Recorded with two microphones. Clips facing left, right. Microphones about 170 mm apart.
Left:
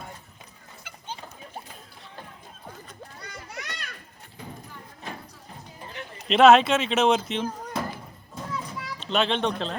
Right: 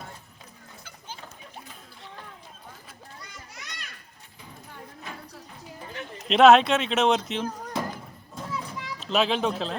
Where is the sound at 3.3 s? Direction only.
60° left (ahead or behind).